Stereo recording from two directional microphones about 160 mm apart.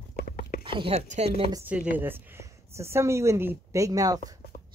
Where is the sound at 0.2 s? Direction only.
70° left (ahead or behind).